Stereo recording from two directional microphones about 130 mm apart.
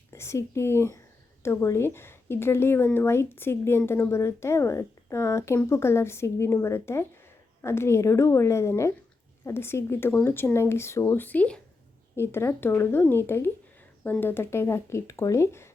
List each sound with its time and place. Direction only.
0.1 s speech: 20° left (ahead or behind)